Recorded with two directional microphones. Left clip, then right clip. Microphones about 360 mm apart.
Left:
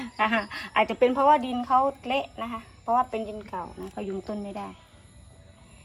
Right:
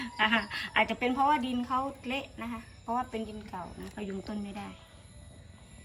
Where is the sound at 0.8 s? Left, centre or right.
Centre.